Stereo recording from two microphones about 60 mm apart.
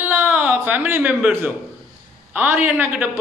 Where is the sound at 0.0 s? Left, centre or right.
Right.